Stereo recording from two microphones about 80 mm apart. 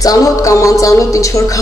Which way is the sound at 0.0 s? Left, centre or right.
Left.